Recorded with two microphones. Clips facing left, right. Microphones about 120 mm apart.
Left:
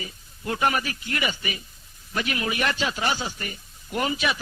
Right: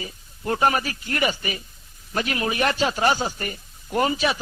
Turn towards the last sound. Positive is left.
turn(degrees=-35)  # may be behind; listen again after turning